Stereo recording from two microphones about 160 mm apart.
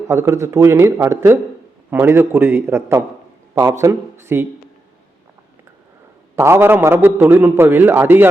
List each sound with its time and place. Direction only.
0.1 s a man's voice: 15° right (ahead or behind)
6.3 s a man's voice: 15° right (ahead or behind)